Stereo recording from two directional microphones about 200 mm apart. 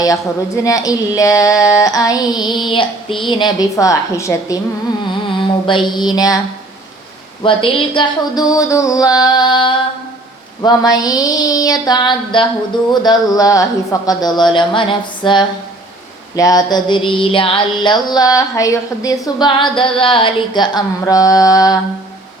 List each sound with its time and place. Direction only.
0.0 s speech: 15° left (ahead or behind)
5.3 s mantra: 25° left (ahead or behind)
7.4 s a sound: 25° left (ahead or behind)